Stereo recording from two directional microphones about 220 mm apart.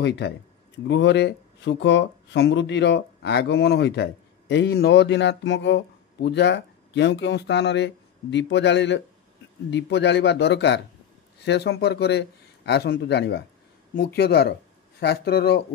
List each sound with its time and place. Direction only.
0.0 s speech: 50° left (ahead or behind)